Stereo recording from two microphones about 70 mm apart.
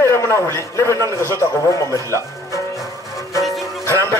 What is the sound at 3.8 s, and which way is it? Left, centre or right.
Music, left.